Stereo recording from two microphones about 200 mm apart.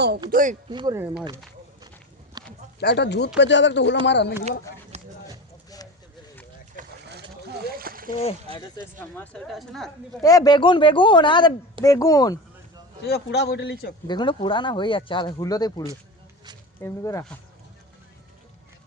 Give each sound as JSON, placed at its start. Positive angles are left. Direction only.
{"t": 0.3, "sound": "speech", "side_deg": -45}
{"t": 0.7, "sound": "speech", "side_deg": -20}
{"t": 2.4, "sound": "a sound", "side_deg": -20}
{"t": 2.8, "sound": "a man's voice", "side_deg": 55}
{"t": 4.9, "sound": "a sound", "side_deg": -35}
{"t": 6.8, "sound": "a sound", "side_deg": -40}
{"t": 7.1, "sound": "splash", "side_deg": -50}
{"t": 8.5, "sound": "speech", "side_deg": -30}
{"t": 9.1, "sound": "speech", "side_deg": 5}
{"t": 10.2, "sound": "speech", "side_deg": 20}
{"t": 13.1, "sound": "a man's voice", "side_deg": 55}
{"t": 14.1, "sound": "speech", "side_deg": 25}